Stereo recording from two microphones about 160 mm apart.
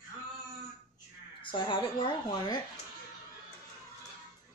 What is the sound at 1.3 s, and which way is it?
Speech, 30° left (ahead or behind).